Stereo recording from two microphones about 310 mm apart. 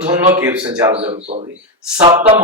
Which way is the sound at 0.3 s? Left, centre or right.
Centre.